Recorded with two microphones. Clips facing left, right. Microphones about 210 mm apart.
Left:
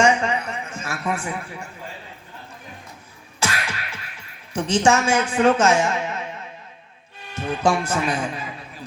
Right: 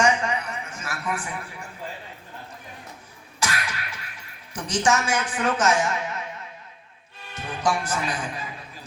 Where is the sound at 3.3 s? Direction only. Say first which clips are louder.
Left 2 dB; 25° left (ahead or behind).